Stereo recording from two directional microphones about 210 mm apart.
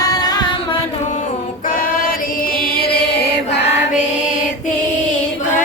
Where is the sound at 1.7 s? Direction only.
40° left (ahead or behind).